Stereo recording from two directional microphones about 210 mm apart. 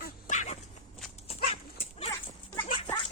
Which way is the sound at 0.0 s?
35° left (ahead or behind).